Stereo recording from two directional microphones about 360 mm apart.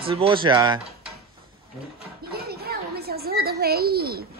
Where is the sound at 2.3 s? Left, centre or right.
Right.